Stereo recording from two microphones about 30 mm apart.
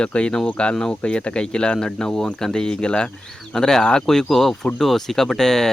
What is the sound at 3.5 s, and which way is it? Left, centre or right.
Speech, centre.